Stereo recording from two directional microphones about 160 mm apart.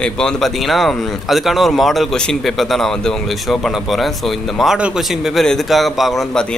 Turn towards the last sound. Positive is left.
turn(degrees=0)  # may be behind; listen again after turning